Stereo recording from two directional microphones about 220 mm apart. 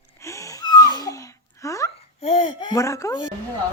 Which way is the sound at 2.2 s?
25° left (ahead or behind).